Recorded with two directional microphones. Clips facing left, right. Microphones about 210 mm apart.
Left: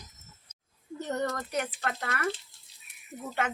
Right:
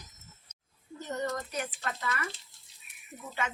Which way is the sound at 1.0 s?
65° left (ahead or behind).